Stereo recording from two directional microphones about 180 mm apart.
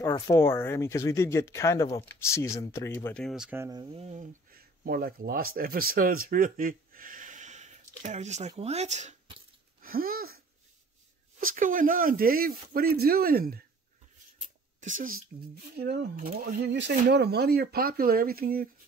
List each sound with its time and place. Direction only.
0.1 s speech: 15° left (ahead or behind); by 4.0 s 25° right (ahead or behind)
4.0 s speech: 45° right (ahead or behind)
9.8 s a sound: 55° right (ahead or behind)
11.3 s speech: 45° right (ahead or behind)
14.8 s speech: 45° right (ahead or behind)
15.7 s speech: 65° right (ahead or behind)
16.7 s speech: 75° right (ahead or behind); by 18.7 s 55° right (ahead or behind)